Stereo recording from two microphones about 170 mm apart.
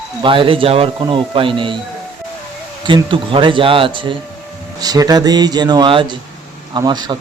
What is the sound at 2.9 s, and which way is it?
Speech, 30° right (ahead or behind).